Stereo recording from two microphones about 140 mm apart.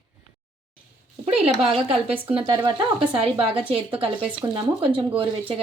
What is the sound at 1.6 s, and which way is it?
Speech, 45° right (ahead or behind).